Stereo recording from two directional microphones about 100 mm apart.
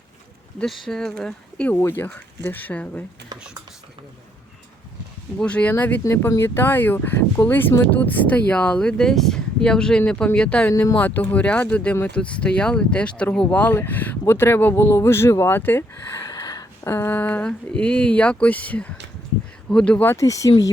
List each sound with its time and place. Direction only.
0.6 s speech: 5° left (ahead or behind)
1.7 s speech: 20° left (ahead or behind)
5.4 s speech: 10° left (ahead or behind)
6.0 s speech: 30° left (ahead or behind); by 10.7 s 10° left (ahead or behind)
10.7 s speech: 25° left (ahead or behind)
16.2 s a sound: 40° left (ahead or behind)
16.9 s speech: 20° left (ahead or behind)
20.1 s speech: 30° left (ahead or behind)